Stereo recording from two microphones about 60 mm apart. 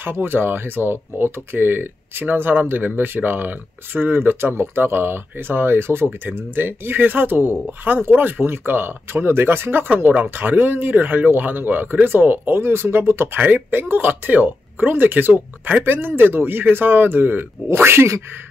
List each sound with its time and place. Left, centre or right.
0.0 s speech: right